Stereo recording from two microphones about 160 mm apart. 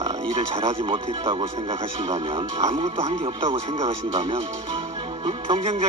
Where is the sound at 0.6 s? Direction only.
35° right (ahead or behind).